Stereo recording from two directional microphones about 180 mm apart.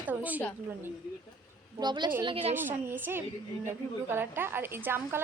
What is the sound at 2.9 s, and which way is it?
A woman's voice, 10° right (ahead or behind).